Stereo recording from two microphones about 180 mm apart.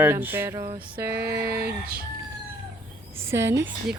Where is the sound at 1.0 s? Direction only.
60° right (ahead or behind).